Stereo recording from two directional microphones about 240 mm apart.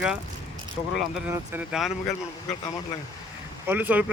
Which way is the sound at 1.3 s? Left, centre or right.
Centre.